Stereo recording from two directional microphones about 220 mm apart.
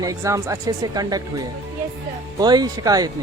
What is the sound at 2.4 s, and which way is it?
Speech, 20° right (ahead or behind).